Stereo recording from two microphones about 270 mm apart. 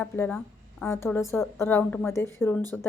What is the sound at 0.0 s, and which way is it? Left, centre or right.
A woman's voice, centre.